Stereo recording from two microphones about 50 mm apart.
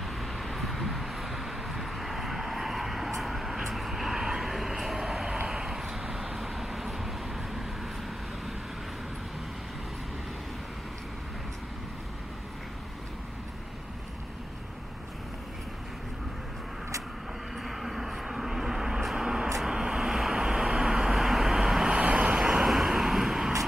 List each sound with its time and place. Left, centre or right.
0.0 s vehicle: centre
17.6 s vehicle: centre
21.8 s vehicle: right; by 23.5 s centre